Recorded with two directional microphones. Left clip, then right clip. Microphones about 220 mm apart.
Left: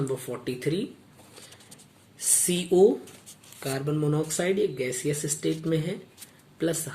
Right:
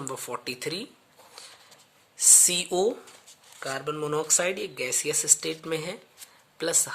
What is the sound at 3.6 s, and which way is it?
Speech, 30° right (ahead or behind).